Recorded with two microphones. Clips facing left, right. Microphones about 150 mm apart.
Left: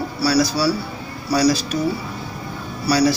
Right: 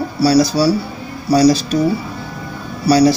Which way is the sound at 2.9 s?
20° right (ahead or behind).